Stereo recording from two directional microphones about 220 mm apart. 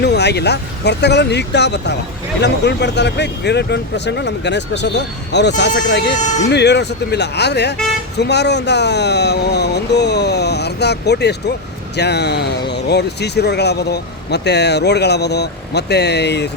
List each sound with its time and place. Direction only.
0.0 s speech: 50° left (ahead or behind)